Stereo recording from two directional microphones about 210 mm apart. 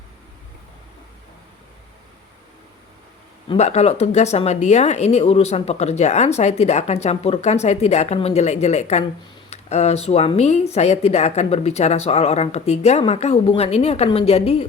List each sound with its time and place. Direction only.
3.5 s speech: 30° left (ahead or behind)